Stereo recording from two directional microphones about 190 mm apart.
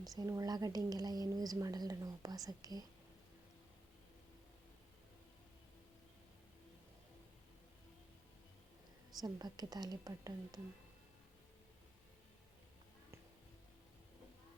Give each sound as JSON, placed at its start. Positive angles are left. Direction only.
{"t": 0.2, "sound": "a woman's voice", "side_deg": -20}
{"t": 9.2, "sound": "a woman's voice", "side_deg": -20}